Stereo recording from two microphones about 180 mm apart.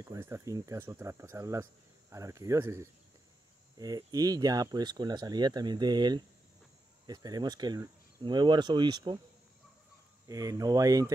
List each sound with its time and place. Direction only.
0.0 s speech: 15° right (ahead or behind)
10.2 s speech: 20° right (ahead or behind)